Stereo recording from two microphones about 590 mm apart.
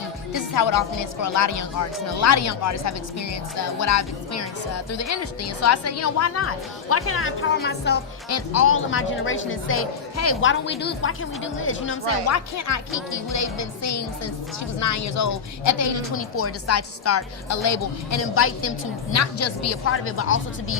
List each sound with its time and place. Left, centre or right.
0.3 s a woman's voice: left